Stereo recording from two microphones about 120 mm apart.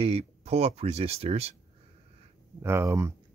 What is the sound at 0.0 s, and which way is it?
Speech, 55° right (ahead or behind).